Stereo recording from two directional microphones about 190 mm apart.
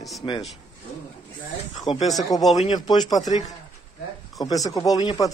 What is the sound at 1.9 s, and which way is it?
Speech, 30° left (ahead or behind).